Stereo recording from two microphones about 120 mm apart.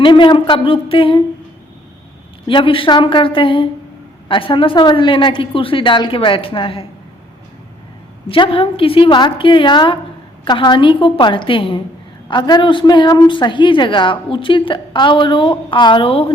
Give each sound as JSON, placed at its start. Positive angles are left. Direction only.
{"t": 0.0, "sound": "a woman's voice", "side_deg": 40}
{"t": 2.5, "sound": "a woman's voice", "side_deg": 45}
{"t": 8.3, "sound": "a woman's voice", "side_deg": 50}